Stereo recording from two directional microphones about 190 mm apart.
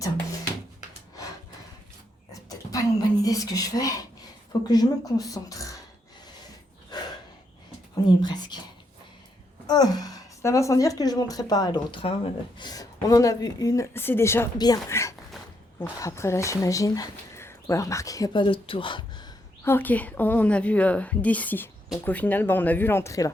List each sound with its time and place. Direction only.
2.3 s a sound: 20° left (ahead or behind)
4.7 s speech: 20° left (ahead or behind)
6.9 s a sound: 20° left (ahead or behind)
8.2 s a woman's voice: 20° left (ahead or behind)
9.6 s a woman's voice: 20° left (ahead or behind)
19.6 s speech: 10° left (ahead or behind)